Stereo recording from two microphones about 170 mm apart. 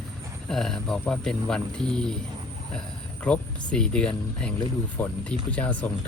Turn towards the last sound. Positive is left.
turn(degrees=10)  # may be behind; listen again after turning